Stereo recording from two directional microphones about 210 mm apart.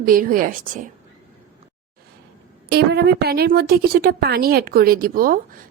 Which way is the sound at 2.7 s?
50° right (ahead or behind).